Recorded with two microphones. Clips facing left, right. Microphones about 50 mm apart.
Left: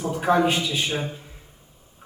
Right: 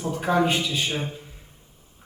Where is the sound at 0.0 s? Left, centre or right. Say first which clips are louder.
Left 2 dB; left.